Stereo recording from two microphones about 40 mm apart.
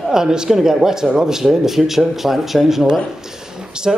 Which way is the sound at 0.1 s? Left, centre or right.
Centre.